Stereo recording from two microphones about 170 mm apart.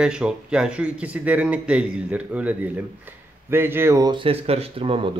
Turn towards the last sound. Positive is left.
turn(degrees=-35)  # may be behind; listen again after turning